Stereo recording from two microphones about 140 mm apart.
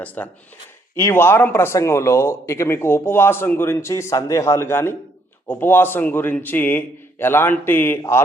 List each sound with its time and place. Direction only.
0.0 s speech: 10° left (ahead or behind)